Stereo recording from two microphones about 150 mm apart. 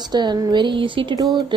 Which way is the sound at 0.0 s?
30° right (ahead or behind).